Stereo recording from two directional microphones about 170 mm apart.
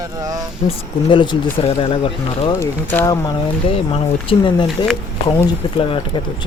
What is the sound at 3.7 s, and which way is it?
Speech, 35° left (ahead or behind).